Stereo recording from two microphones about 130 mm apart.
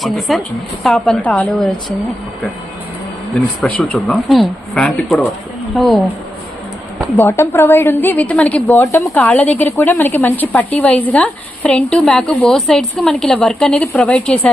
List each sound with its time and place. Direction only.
0.0 s a woman's voice: centre (ahead or behind)
3.6 s a woman's voice: 10° left (ahead or behind)
7.2 s speech: 20° left (ahead or behind)
8.8 s speech: 25° left (ahead or behind)
9.1 s speech: 10° left (ahead or behind)